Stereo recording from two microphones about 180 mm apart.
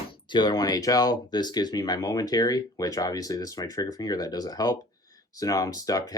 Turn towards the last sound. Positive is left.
turn(degrees=20)  # may be behind; listen again after turning